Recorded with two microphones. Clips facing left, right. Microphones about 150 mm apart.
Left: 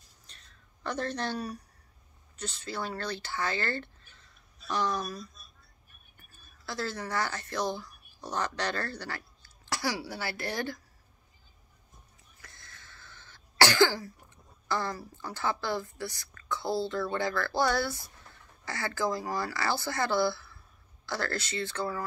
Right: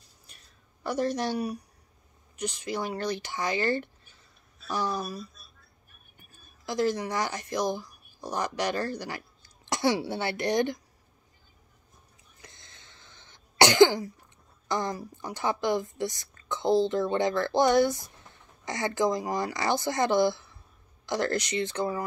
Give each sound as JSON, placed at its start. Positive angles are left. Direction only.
{"t": 0.3, "sound": "a sound", "side_deg": -10}
{"t": 2.3, "sound": "speech", "side_deg": -15}
{"t": 6.6, "sound": "speech", "side_deg": -15}
{"t": 12.4, "sound": "cough", "side_deg": -20}
{"t": 14.7, "sound": "a woman's voice", "side_deg": -15}